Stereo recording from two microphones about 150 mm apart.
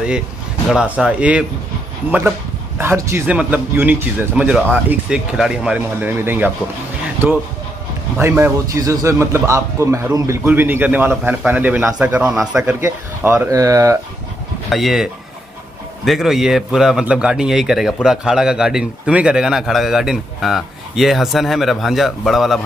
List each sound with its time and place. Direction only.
0.7 s a man's voice: 5° right (ahead or behind)
8.2 s a man's voice: 15° right (ahead or behind)
14.7 s a man's voice: centre (ahead or behind)
16.1 s a man's voice: 5° right (ahead or behind)